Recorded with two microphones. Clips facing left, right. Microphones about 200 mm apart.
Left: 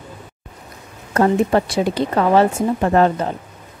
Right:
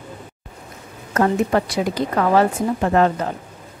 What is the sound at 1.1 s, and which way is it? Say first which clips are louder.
A woman's voice: left 2 dB; 30° left (ahead or behind).